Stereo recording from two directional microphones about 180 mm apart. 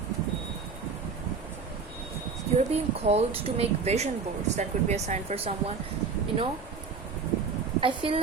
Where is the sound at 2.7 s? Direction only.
35° right (ahead or behind).